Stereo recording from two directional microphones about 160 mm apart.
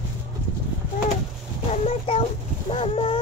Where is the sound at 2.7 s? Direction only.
35° left (ahead or behind).